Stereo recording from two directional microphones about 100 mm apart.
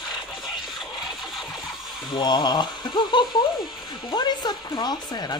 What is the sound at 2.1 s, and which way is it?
Speech, 45° left (ahead or behind).